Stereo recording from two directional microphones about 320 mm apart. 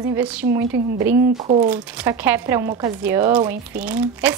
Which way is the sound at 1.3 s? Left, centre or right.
Right.